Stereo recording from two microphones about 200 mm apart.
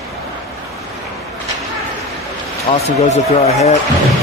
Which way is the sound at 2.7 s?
25° left (ahead or behind).